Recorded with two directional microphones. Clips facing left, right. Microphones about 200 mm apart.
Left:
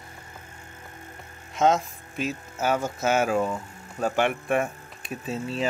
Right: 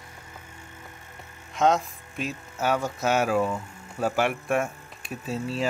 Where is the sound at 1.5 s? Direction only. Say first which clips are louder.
Left 1 dB; centre (ahead or behind).